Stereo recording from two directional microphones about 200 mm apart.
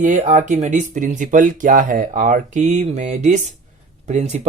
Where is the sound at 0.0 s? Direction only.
40° right (ahead or behind).